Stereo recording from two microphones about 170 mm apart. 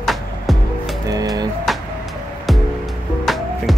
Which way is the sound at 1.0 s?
20° right (ahead or behind).